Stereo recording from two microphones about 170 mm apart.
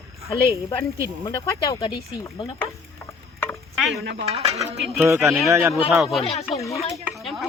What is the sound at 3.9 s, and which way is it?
Dishes, 90° right.